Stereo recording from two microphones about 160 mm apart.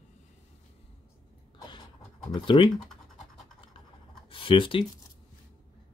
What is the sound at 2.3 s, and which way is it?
Speech, 30° left (ahead or behind).